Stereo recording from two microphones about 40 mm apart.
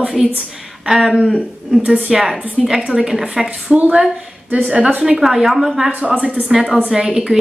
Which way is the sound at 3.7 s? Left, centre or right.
Right.